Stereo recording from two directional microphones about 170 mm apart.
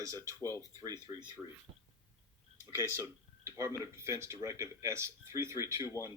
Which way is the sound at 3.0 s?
15° right (ahead or behind).